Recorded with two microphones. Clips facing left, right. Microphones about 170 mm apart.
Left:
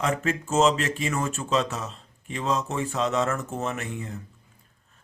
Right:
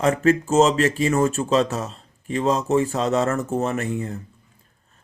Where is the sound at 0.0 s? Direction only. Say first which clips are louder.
Right 8 dB; 40° right (ahead or behind).